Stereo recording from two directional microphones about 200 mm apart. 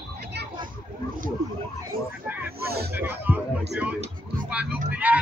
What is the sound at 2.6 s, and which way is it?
Speech, 50° right (ahead or behind).